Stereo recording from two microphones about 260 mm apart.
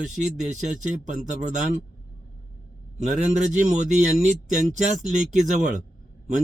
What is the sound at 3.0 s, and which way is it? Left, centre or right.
Speech, right.